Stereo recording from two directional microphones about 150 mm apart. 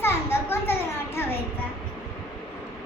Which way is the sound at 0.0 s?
15° left (ahead or behind).